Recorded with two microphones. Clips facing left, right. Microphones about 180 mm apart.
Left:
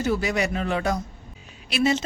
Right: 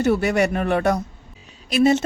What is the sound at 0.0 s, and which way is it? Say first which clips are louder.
A woman's voice: right 5 dB; 60° right (ahead or behind).